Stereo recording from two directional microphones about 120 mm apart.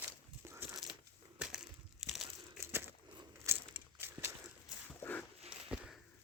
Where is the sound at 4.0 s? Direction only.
20° right (ahead or behind).